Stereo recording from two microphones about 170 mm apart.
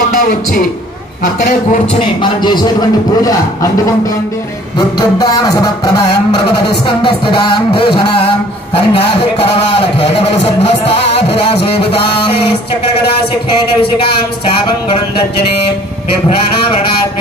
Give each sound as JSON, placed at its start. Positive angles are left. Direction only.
{"t": 0.1, "sound": "a man's voice", "side_deg": 50}
{"t": 2.2, "sound": "speech", "side_deg": 25}
{"t": 4.7, "sound": "a man's voice", "side_deg": 25}